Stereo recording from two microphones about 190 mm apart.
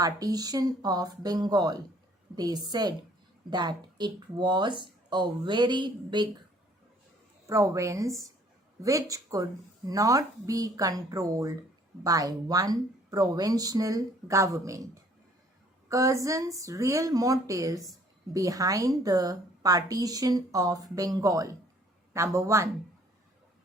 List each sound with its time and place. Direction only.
0.0 s a woman's voice: 20° right (ahead or behind)
7.4 s a woman's voice: 15° right (ahead or behind)
15.9 s a woman's voice: 15° right (ahead or behind)